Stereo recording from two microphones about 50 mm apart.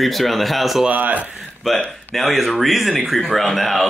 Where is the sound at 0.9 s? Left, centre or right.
Right.